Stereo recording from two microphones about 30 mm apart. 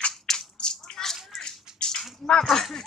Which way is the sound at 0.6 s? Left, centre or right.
Left.